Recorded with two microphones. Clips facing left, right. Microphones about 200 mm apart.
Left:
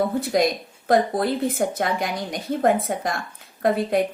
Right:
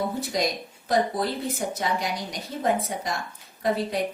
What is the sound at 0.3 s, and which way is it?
A woman's voice, 55° left (ahead or behind).